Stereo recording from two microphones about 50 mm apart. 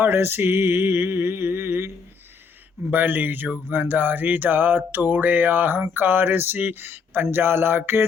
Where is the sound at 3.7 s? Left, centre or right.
Right.